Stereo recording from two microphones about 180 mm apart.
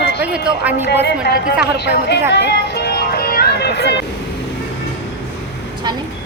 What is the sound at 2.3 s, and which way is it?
Music, 70° left (ahead or behind).